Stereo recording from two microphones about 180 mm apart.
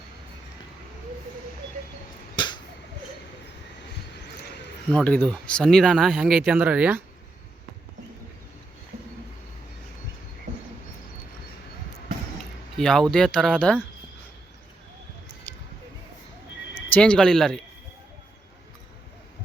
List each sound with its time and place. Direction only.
2.3 s finger snapping: 25° left (ahead or behind)
4.9 s speech: 5° left (ahead or behind)
12.8 s speech: 5° left (ahead or behind)
16.7 s speech: 10° left (ahead or behind)